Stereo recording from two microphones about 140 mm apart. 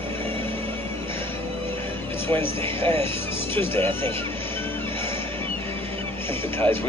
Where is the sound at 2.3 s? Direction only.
15° left (ahead or behind).